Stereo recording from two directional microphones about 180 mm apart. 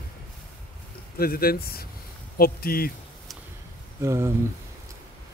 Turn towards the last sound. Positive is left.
turn(degrees=-15)  # may be behind; listen again after turning